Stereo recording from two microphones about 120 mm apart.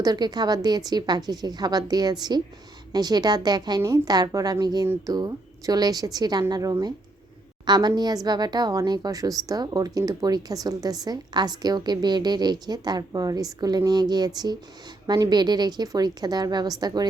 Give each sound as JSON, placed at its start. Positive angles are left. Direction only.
{"t": 0.0, "sound": "speech", "side_deg": -35}